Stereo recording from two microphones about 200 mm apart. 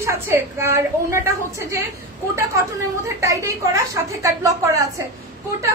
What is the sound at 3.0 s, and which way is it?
A woman's voice, 15° right (ahead or behind).